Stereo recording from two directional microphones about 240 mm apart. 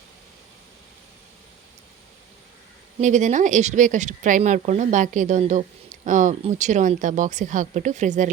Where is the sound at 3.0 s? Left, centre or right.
Right.